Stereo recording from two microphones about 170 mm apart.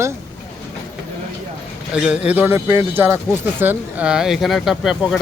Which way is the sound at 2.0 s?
10° right (ahead or behind).